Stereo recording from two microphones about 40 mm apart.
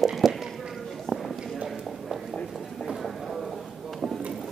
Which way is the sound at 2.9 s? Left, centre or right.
Centre.